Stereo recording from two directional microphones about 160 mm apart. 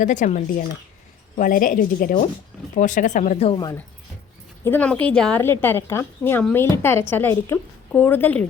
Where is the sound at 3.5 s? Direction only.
25° left (ahead or behind).